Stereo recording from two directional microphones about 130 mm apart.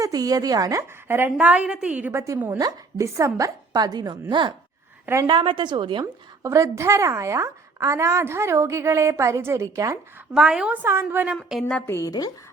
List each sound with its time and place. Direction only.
0.0 s a woman's voice: 30° right (ahead or behind); by 2.2 s 15° right (ahead or behind)
2.6 s a woman's voice: 25° right (ahead or behind)
6.4 s a woman's voice: 25° right (ahead or behind)
10.3 s a woman's voice: 5° right (ahead or behind)
10.8 s a woman's voice: 20° right (ahead or behind)
11.9 s a woman's voice: 25° left (ahead or behind)